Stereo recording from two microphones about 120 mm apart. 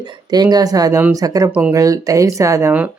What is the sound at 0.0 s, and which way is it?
Speech, 35° right (ahead or behind).